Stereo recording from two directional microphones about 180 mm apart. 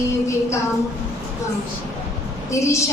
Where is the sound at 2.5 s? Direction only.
15° left (ahead or behind).